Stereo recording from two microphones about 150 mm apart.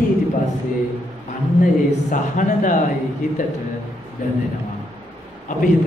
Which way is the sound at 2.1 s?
60° left (ahead or behind).